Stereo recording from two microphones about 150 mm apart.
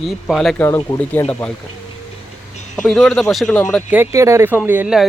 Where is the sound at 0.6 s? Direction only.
15° left (ahead or behind).